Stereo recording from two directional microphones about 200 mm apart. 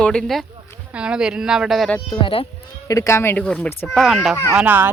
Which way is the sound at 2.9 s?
15° left (ahead or behind).